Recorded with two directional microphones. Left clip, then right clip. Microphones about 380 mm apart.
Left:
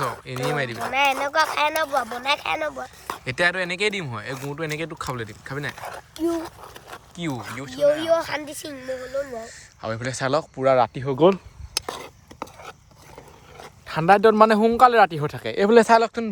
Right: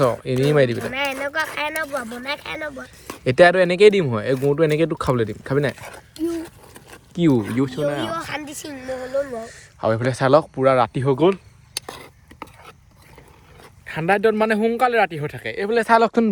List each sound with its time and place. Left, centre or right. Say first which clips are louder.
0.0 s speech: right 8 dB; centre
0.9 s speech: left 7 dB; centre
3.2 s speech: right 9 dB; centre
7.2 s speech: right 12 dB; centre
8.1 s speech: left 5 dB; centre
8.8 s speech: right 4 dB; centre
11.9 s cutlery: left 3 dB; centre
13.6 s speech: left 2 dB; centre
15.9 s speech: right 2 dB; centre